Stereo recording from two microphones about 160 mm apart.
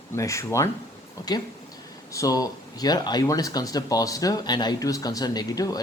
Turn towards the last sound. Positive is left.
turn(degrees=25)  # may be behind; listen again after turning